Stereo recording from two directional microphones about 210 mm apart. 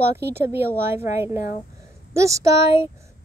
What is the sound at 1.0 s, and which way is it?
A woman's voice, 10° right (ahead or behind).